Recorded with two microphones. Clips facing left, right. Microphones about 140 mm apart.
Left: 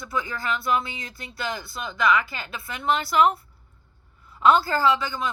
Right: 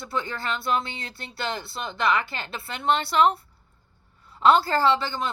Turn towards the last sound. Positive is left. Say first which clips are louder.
# even
turn(degrees=-30)  # may be behind; listen again after turning